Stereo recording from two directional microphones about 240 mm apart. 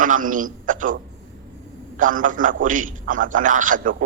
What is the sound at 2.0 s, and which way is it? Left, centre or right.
A man's voice, right.